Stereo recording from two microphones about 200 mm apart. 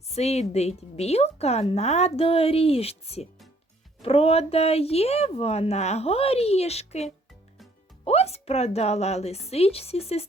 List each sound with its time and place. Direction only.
0.1 s speech: 30° left (ahead or behind)